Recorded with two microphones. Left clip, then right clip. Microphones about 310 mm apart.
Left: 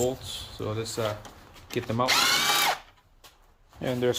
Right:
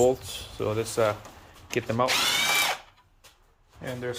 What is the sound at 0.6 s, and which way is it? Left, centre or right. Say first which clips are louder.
Speech: right 6 dB; centre.